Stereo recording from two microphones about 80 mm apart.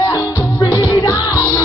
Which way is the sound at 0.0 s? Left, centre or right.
Left.